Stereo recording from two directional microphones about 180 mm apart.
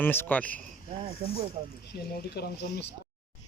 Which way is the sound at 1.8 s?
60° left (ahead or behind).